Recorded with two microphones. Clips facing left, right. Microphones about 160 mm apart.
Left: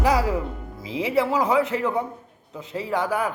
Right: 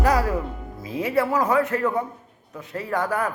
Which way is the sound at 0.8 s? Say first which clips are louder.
Even; 90° left.